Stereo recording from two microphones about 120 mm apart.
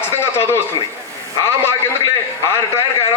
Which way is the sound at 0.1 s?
20° left (ahead or behind).